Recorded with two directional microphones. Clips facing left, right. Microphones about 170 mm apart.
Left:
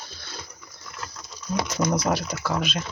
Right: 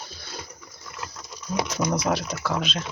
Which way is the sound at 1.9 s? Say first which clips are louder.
Left 1 dB; centre (ahead or behind).